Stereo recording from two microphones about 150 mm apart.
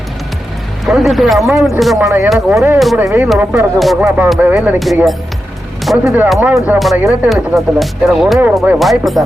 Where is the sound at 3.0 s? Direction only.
15° right (ahead or behind).